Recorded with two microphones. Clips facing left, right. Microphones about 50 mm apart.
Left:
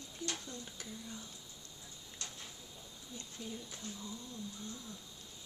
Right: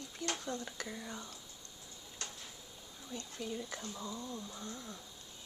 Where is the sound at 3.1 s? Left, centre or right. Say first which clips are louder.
Right 5 dB; right.